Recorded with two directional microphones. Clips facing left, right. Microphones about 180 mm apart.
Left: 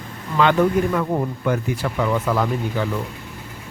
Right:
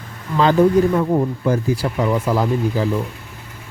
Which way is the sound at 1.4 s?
35° right (ahead or behind).